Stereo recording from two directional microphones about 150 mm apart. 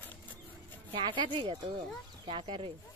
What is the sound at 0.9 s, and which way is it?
Speech, 30° right (ahead or behind).